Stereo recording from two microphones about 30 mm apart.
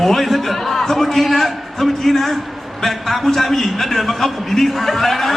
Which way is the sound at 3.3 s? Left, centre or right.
Centre.